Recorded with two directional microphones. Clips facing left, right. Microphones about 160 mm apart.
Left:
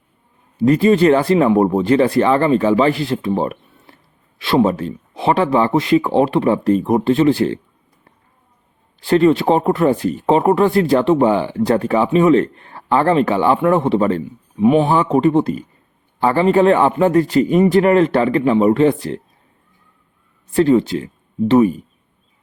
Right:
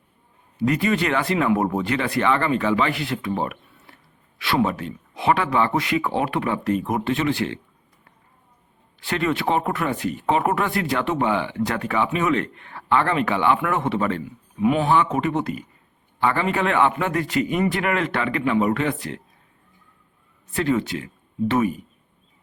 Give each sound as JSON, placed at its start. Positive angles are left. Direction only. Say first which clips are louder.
{"t": 0.6, "sound": "speech", "louder": "left 9 dB", "side_deg": 30}
{"t": 9.0, "sound": "speech", "louder": "left 11 dB", "side_deg": 35}
{"t": 14.9, "sound": "speech", "louder": "left 7 dB", "side_deg": 35}
{"t": 20.6, "sound": "speech", "louder": "left 9 dB", "side_deg": 30}